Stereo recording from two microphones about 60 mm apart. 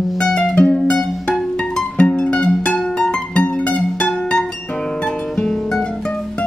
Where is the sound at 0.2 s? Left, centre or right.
Centre.